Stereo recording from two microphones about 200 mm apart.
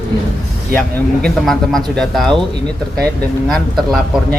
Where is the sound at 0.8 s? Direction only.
5° left (ahead or behind).